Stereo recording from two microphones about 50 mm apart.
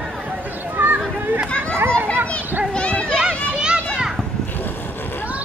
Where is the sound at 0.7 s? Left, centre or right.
Right.